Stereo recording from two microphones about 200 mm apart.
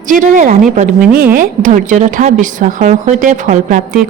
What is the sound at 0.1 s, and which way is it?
A woman's voice, 40° right (ahead or behind).